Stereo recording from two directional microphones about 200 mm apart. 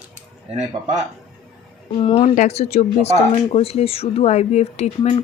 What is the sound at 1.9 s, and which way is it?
Speech, 30° left (ahead or behind).